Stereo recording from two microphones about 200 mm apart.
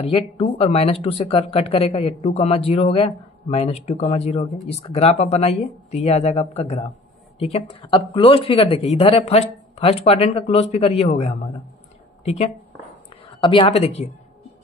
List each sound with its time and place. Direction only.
0.0 s speech: 30° left (ahead or behind)
13.4 s speech: 25° left (ahead or behind)